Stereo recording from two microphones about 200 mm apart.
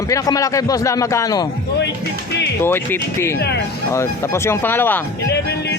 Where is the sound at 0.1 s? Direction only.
15° left (ahead or behind).